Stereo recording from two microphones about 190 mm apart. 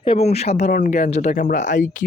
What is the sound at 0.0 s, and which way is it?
Speech, 30° left (ahead or behind).